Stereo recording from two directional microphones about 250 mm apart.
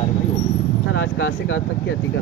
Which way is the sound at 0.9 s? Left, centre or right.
Left.